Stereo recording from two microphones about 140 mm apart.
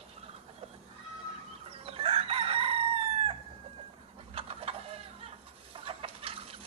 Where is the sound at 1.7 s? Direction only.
45° right (ahead or behind).